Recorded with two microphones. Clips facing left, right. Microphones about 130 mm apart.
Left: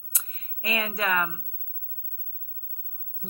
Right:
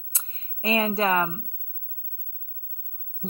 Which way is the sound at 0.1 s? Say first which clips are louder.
Even; 30° right (ahead or behind).